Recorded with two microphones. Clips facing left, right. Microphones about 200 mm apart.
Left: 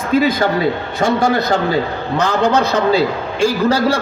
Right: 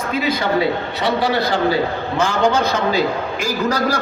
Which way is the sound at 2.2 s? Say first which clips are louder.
Left 2 dB; 35° left (ahead or behind).